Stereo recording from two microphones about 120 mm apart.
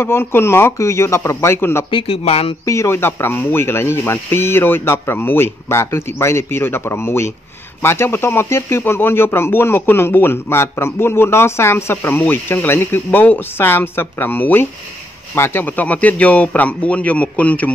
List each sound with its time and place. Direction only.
0.0 s speech: 20° left (ahead or behind)
1.9 s speech: 50° left (ahead or behind)
2.6 s a man's voice: 25° left (ahead or behind)